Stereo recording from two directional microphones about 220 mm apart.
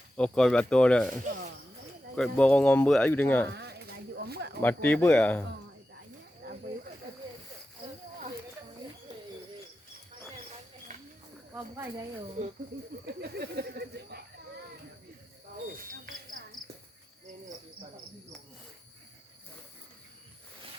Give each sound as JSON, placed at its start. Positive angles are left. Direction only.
{"t": 0.2, "sound": "speech", "side_deg": 5}
{"t": 2.1, "sound": "speech", "side_deg": 5}
{"t": 3.5, "sound": "sheep", "side_deg": -50}
{"t": 4.6, "sound": "speech", "side_deg": 5}
{"t": 11.5, "sound": "speech", "side_deg": -10}
{"t": 12.4, "sound": "speech", "side_deg": -35}
{"t": 13.1, "sound": "speech", "side_deg": -45}